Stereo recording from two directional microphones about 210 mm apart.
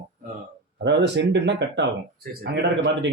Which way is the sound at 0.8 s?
55° right (ahead or behind).